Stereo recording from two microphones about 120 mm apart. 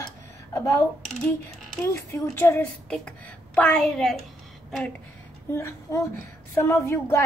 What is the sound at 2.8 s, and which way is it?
A child's voice, 5° left (ahead or behind).